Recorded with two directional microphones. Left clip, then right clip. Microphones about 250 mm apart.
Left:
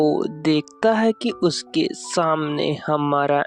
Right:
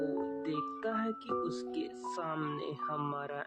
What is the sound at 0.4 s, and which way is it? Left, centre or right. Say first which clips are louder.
Speech: left 17 dB; left.